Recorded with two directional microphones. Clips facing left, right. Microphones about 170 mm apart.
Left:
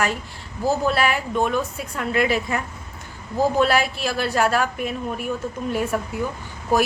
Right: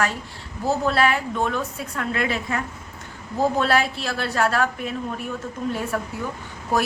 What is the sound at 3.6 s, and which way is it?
A woman's voice, 15° left (ahead or behind).